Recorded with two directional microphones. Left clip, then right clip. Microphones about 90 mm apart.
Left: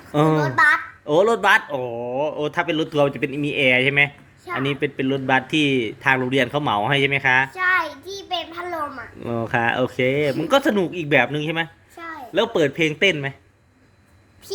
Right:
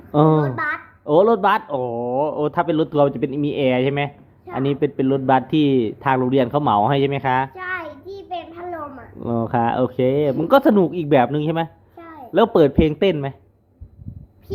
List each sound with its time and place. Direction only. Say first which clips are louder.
0.1 s speech: right 3 dB; 20° right (ahead or behind)
0.3 s a sound: left 5 dB; 25° left (ahead or behind)
1.0 s speech: right 2 dB; 20° right (ahead or behind)
1.8 s speech: right 3 dB; 30° right (ahead or behind)
7.5 s a sound: left 8 dB; 30° left (ahead or behind)
9.5 s speech: even; 20° right (ahead or behind)
10.5 s speech: right 5 dB; 35° right (ahead or behind)
11.9 s a sound: left 6 dB; 20° left (ahead or behind)
12.3 s speech: right 5 dB; 40° right (ahead or behind)
12.7 s speech: right 1 dB; 30° right (ahead or behind)